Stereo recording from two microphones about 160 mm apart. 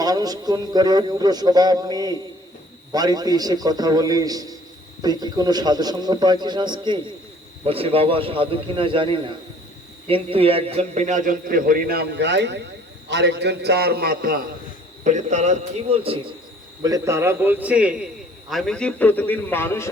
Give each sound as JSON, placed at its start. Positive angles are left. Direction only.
{"t": 0.0, "sound": "a man's voice", "side_deg": -25}
{"t": 15.0, "sound": "a man's voice", "side_deg": -50}
{"t": 16.8, "sound": "a man's voice", "side_deg": -20}